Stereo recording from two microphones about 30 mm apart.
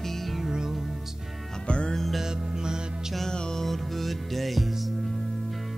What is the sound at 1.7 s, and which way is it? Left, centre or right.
Music, left.